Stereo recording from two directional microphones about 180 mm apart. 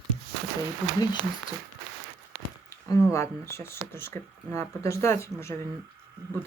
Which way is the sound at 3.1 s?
15° left (ahead or behind).